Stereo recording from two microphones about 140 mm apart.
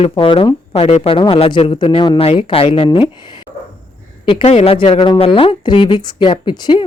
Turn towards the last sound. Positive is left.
turn(degrees=30)  # may be behind; listen again after turning